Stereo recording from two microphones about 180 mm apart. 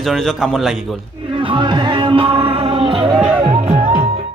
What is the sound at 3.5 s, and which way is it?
Music, 40° right (ahead or behind).